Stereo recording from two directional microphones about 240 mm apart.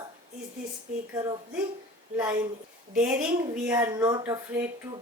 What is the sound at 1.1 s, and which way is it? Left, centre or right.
A woman's voice, centre.